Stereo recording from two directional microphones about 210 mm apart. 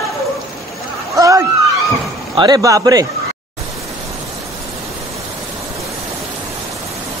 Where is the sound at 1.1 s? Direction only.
15° right (ahead or behind).